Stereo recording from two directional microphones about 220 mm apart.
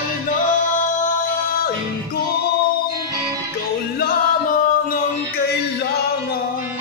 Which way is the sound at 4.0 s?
40° left (ahead or behind).